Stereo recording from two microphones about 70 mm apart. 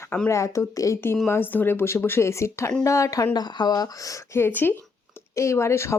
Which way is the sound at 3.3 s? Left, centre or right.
Left.